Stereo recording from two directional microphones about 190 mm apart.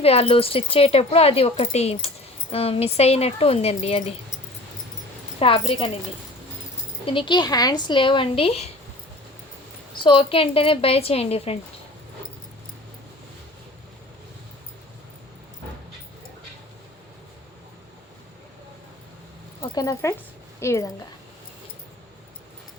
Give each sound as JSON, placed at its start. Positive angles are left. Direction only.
{"t": 0.0, "sound": "speech", "side_deg": 30}
{"t": 5.4, "sound": "a woman's voice", "side_deg": 30}
{"t": 7.0, "sound": "a woman's voice", "side_deg": 25}
{"t": 10.0, "sound": "a woman's voice", "side_deg": 25}
{"t": 19.6, "sound": "speech", "side_deg": 20}